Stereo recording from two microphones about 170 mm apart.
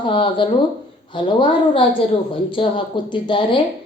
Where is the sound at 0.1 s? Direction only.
30° left (ahead or behind).